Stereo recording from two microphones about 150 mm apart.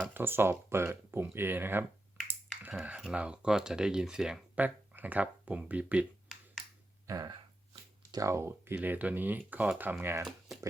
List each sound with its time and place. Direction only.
0.1 s speech: 15° right (ahead or behind)
2.8 s speech: 5° right (ahead or behind)
6.2 s finger snapping: centre (ahead or behind)
7.1 s speech: 25° right (ahead or behind)